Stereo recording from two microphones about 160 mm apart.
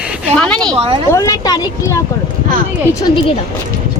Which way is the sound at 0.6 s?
30° right (ahead or behind).